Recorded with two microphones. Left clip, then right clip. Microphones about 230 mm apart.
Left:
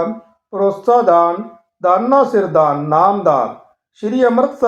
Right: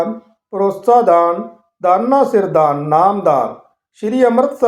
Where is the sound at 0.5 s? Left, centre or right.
Right.